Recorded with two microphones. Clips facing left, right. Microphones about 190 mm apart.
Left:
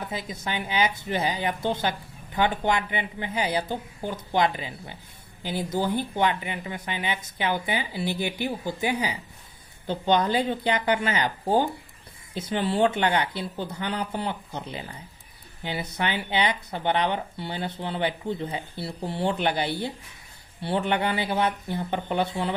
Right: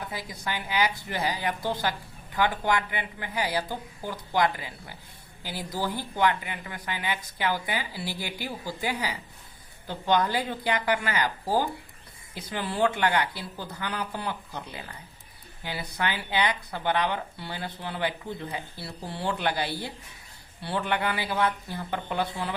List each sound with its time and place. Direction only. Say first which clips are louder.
0.1 s speech: left 3 dB; 20° left (ahead or behind)